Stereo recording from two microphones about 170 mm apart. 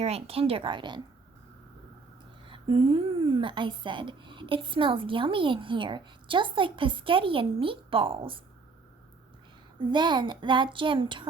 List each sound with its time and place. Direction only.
0.0 s a woman's voice: 35° right (ahead or behind)
2.5 s a woman's voice: 30° right (ahead or behind)
9.8 s speech: 25° right (ahead or behind)